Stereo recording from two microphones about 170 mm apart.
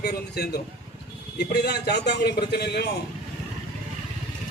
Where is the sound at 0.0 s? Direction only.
70° left (ahead or behind).